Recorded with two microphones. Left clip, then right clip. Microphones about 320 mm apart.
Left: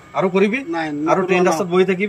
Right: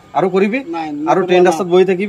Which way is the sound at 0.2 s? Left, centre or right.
Centre.